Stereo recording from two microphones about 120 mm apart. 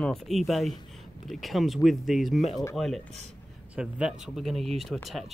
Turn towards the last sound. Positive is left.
turn(degrees=0)  # may be behind; listen again after turning